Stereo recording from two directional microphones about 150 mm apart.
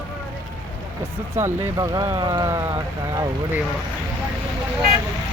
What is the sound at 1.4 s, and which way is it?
Speech, 20° right (ahead or behind).